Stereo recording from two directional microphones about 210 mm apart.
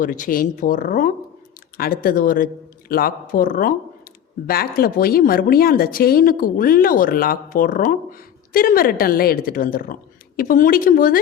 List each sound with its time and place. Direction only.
0.0 s a woman's voice: 40° left (ahead or behind)